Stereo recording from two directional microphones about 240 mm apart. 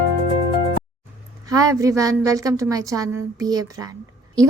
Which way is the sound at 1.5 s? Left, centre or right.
Centre.